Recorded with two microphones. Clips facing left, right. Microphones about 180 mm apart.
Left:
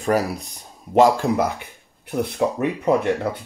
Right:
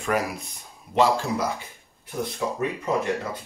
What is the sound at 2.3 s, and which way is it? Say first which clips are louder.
Speech: left 5 dB; 60° left (ahead or behind).